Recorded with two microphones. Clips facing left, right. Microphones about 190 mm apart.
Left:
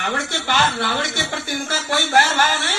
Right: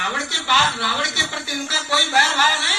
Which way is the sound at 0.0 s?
50° left (ahead or behind).